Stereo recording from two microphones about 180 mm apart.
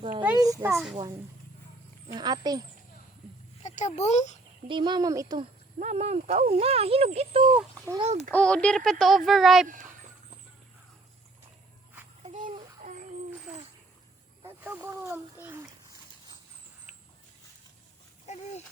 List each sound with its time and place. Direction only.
0.0 s a sound: 25° right (ahead or behind)
0.7 s a child's voice: centre (ahead or behind)
2.1 s speech: 25° right (ahead or behind)
3.6 s speech: 40° left (ahead or behind)
4.7 s speech: 25° right (ahead or behind)
5.8 s speech: 40° right (ahead or behind)
7.5 s a child's voice: 15° right (ahead or behind)
8.3 s a child's voice: 5° left (ahead or behind)
9.6 s a sound: 45° right (ahead or behind)
12.2 s babbling: 45° right (ahead or behind)
14.4 s speech: 10° right (ahead or behind)
18.3 s a sound: 40° left (ahead or behind)